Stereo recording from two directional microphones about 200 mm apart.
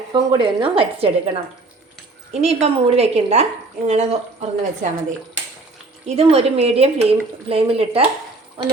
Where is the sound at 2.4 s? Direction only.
30° right (ahead or behind).